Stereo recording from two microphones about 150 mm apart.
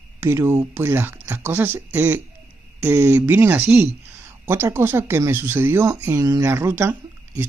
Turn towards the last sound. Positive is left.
turn(degrees=-15)  # may be behind; listen again after turning